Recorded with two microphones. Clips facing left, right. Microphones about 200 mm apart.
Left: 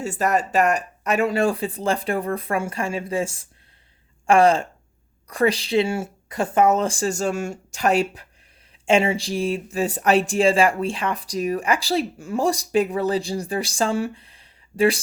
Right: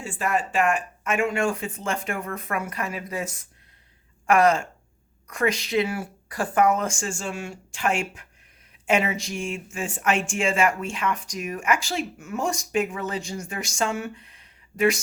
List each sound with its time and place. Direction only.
0.0 s speech: 40° left (ahead or behind)